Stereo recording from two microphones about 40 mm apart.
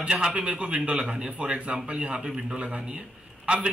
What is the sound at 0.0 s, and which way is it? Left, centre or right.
A man's voice, centre.